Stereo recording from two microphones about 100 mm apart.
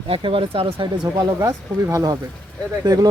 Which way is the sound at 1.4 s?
35° right (ahead or behind).